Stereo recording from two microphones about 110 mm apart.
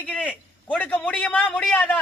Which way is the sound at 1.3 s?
15° left (ahead or behind).